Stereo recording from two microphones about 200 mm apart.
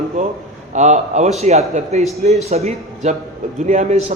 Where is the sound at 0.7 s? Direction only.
35° right (ahead or behind).